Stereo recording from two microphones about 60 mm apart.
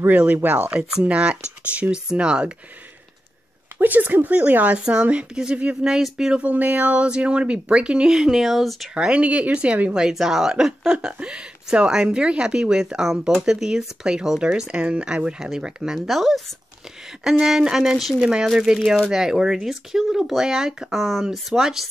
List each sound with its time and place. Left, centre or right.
0.0 s speech: right
3.8 s speech: right; by 6.4 s centre
6.4 s speech: right; by 8.8 s centre
8.9 s speech: centre